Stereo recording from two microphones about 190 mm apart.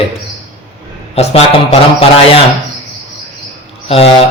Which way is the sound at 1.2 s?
35° left (ahead or behind).